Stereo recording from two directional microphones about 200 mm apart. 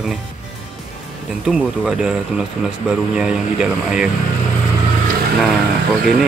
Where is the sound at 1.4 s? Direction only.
5° right (ahead or behind).